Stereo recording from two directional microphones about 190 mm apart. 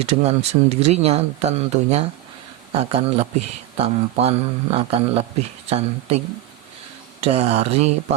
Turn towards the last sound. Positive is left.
turn(degrees=-35)  # may be behind; listen again after turning